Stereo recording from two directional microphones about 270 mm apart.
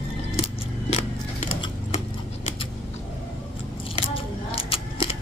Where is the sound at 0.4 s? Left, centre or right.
Left.